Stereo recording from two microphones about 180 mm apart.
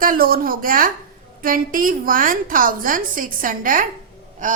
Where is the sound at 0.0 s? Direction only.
50° right (ahead or behind).